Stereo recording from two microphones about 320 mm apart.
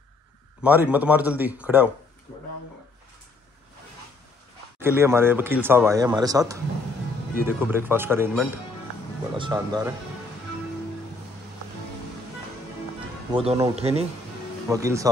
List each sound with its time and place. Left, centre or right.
0.6 s speech: centre
4.7 s speech: centre
13.3 s speech: centre